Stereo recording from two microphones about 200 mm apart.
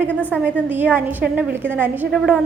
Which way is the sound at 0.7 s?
10° right (ahead or behind).